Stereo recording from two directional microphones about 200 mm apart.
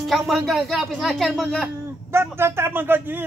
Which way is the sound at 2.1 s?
10° right (ahead or behind).